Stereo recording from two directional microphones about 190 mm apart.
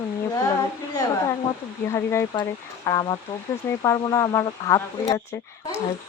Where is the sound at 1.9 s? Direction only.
15° left (ahead or behind).